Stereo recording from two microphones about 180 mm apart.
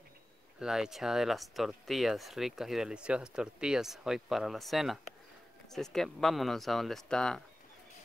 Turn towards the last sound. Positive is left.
turn(degrees=5)  # may be behind; listen again after turning